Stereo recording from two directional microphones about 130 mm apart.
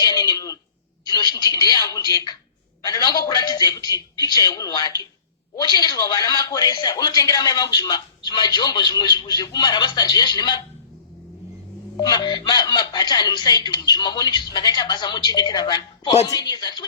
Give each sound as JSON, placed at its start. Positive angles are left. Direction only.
{"t": 0.0, "sound": "a sound", "side_deg": 30}
{"t": 1.0, "sound": "a man's voice", "side_deg": 30}
{"t": 11.9, "sound": "speech", "side_deg": 30}